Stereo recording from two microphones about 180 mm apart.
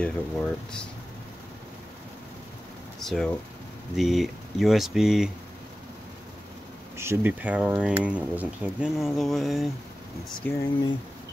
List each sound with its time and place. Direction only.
0.0 s speech: 5° left (ahead or behind)
3.0 s speech: centre (ahead or behind)
7.0 s speech: 10° right (ahead or behind); by 10.6 s 10° left (ahead or behind)